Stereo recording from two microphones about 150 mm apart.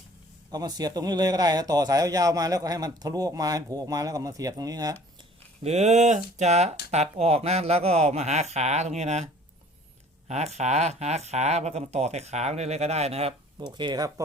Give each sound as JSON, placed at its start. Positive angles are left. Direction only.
{"t": 0.5, "sound": "a man's voice", "side_deg": -25}
{"t": 5.6, "sound": "speech", "side_deg": -50}
{"t": 10.2, "sound": "speech", "side_deg": -45}
{"t": 13.6, "sound": "a man's voice", "side_deg": -30}